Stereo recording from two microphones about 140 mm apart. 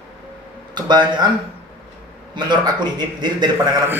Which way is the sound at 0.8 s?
30° right (ahead or behind).